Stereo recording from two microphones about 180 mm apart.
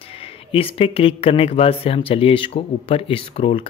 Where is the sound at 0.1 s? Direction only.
30° left (ahead or behind).